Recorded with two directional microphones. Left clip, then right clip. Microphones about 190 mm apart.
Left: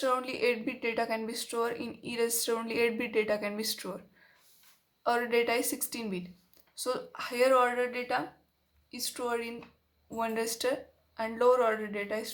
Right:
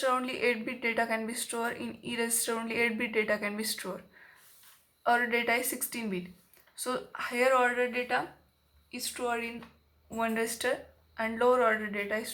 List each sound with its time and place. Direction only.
0.0 s speech: 30° left (ahead or behind)
5.0 s a woman's voice: 35° left (ahead or behind)
10.1 s speech: 35° left (ahead or behind)